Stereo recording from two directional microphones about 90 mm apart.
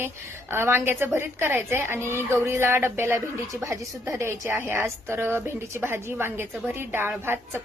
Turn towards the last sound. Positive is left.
turn(degrees=-25)  # may be behind; listen again after turning